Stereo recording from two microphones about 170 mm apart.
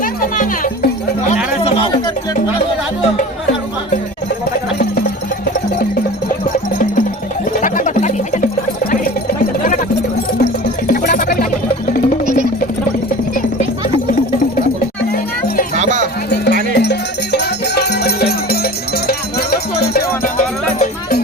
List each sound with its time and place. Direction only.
0.0 s music: 55° left (ahead or behind)
7.6 s a sound: 50° left (ahead or behind)
10.8 s music: 60° left (ahead or behind)
15.7 s music: 45° right (ahead or behind)
16.3 s music: 80° left; by 21.2 s 55° left (ahead or behind)